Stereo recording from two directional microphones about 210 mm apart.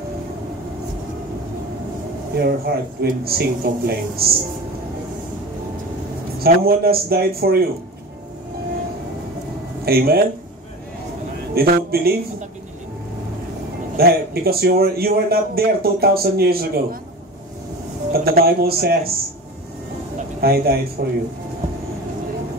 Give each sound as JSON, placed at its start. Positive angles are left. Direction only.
{"t": 2.3, "sound": "a man's voice", "side_deg": -50}
{"t": 6.4, "sound": "a man's voice", "side_deg": -45}
{"t": 9.8, "sound": "a man's voice", "side_deg": -45}
{"t": 11.5, "sound": "a man's voice", "side_deg": -45}
{"t": 13.9, "sound": "a man's voice", "side_deg": -45}
{"t": 18.1, "sound": "a man's voice", "side_deg": -45}
{"t": 20.3, "sound": "a man's voice", "side_deg": -45}